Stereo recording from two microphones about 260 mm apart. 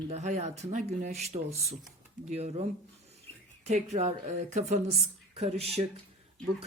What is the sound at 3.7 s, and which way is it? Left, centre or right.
Speech, right.